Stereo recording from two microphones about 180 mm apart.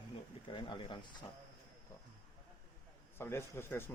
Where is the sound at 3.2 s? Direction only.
15° left (ahead or behind).